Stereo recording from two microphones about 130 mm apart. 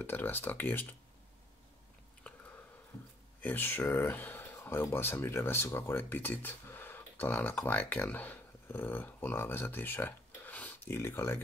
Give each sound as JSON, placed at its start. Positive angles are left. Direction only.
{"t": 0.0, "sound": "speech", "side_deg": 15}
{"t": 2.3, "sound": "a sound", "side_deg": 10}
{"t": 3.3, "sound": "speech", "side_deg": 15}